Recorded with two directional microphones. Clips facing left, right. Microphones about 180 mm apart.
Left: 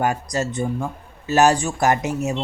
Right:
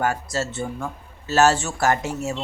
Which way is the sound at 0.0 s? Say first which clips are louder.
Left 2 dB; 15° left (ahead or behind).